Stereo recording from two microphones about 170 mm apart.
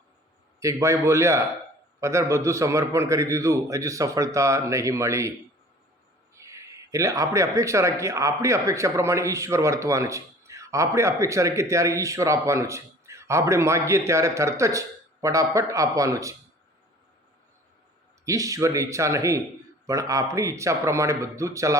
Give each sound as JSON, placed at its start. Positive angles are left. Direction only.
{"t": 0.6, "sound": "a man's voice", "side_deg": -15}
{"t": 6.3, "sound": "a man's voice", "side_deg": -15}
{"t": 18.3, "sound": "a man's voice", "side_deg": -20}